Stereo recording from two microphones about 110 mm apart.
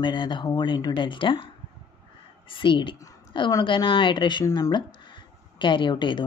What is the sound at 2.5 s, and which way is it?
Speech, 50° left (ahead or behind).